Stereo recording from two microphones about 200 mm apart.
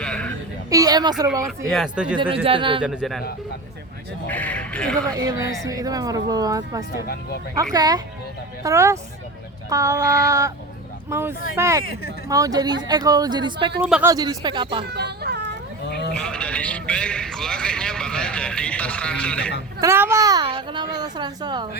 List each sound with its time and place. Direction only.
0.0 s a sound: 5° left (ahead or behind)
0.7 s a woman's voice: 20° right (ahead or behind)
1.5 s a man's voice: centre (ahead or behind)
2.1 s a woman's voice: 25° right (ahead or behind)
2.8 s a man's voice: 5° right (ahead or behind)
4.3 s speech: 10° left (ahead or behind)
5.0 s a woman's voice: 15° right (ahead or behind)
13.8 s a man's voice: 5° right (ahead or behind)
14.1 s a woman's voice: 20° right (ahead or behind)
14.8 s speech: 55° right (ahead or behind)
15.8 s livestock: 55° left (ahead or behind)
16.1 s a man's voice: 5° left (ahead or behind)
19.8 s a woman's voice: 15° right (ahead or behind)